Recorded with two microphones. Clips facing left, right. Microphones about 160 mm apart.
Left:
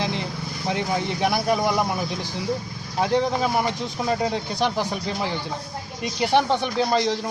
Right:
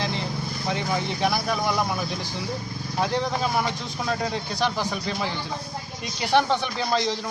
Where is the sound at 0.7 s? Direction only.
10° left (ahead or behind).